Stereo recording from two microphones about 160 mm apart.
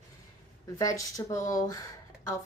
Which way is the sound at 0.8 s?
20° left (ahead or behind).